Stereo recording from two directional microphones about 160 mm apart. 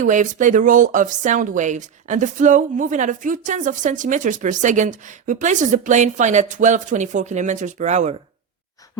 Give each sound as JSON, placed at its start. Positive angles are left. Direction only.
{"t": 0.0, "sound": "speech", "side_deg": -50}